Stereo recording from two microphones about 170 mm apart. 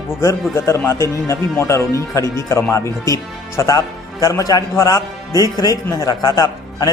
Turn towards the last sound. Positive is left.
turn(degrees=20)  # may be behind; listen again after turning